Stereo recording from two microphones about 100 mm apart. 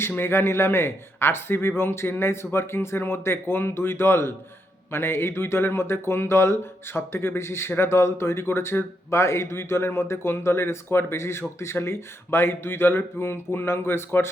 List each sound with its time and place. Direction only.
0.2 s speech: 25° left (ahead or behind)